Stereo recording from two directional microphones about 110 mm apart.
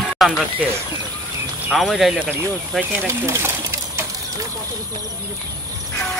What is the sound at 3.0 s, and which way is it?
Speech, 25° right (ahead or behind).